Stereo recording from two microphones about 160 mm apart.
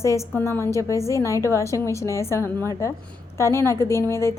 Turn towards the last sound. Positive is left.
turn(degrees=15)  # may be behind; listen again after turning